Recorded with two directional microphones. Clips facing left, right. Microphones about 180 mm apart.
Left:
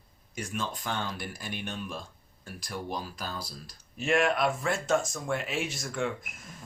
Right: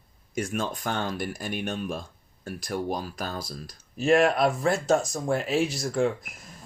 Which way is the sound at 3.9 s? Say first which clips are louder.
Right 6 dB; 35° right (ahead or behind).